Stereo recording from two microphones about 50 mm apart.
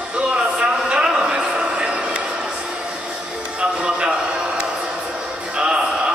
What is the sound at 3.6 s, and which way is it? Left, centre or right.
Music, right.